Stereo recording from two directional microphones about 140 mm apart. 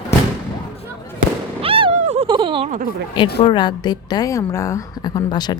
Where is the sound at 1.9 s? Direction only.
50° right (ahead or behind).